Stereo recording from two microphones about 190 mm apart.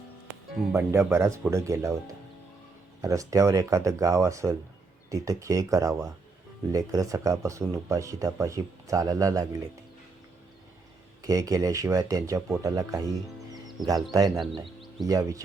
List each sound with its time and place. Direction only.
0.7 s speech: 15° right (ahead or behind)
3.0 s speech: 15° right (ahead or behind)
11.2 s speech: 20° right (ahead or behind)